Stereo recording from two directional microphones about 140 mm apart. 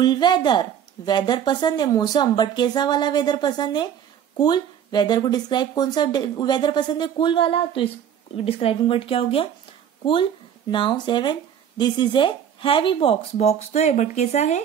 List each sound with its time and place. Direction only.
0.0 s speech: 30° left (ahead or behind)
10.7 s speech: 35° left (ahead or behind); by 14.6 s 55° left (ahead or behind)